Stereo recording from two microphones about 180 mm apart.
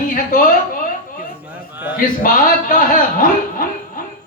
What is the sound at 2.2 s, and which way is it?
Speech, 50° left (ahead or behind).